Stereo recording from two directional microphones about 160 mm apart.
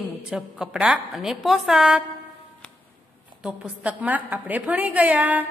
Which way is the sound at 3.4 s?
10° right (ahead or behind).